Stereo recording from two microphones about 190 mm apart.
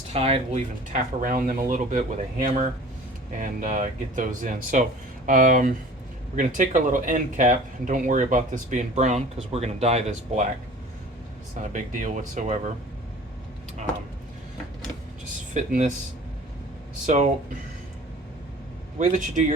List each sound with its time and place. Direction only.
0.1 s speech: 30° right (ahead or behind)
11.6 s speech: 45° right (ahead or behind)
15.5 s speech: 40° right (ahead or behind)
18.9 s speech: 40° right (ahead or behind)